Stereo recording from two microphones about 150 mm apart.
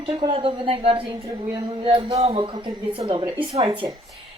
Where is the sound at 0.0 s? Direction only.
35° right (ahead or behind).